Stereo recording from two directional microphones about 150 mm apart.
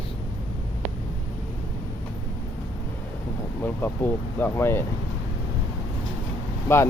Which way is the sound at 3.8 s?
15° left (ahead or behind).